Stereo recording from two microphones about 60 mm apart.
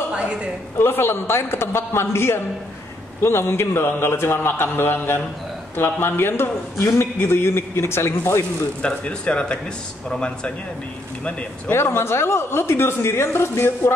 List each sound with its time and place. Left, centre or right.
0.1 s a sound: centre
0.7 s a woman's voice: left
8.8 s speech: centre
11.7 s a woman's voice: left